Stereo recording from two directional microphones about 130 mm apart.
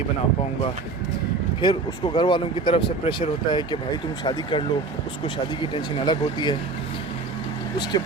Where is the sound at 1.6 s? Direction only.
40° left (ahead or behind).